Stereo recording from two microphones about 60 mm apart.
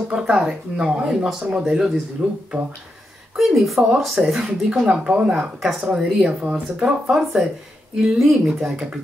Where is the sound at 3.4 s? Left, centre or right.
Centre.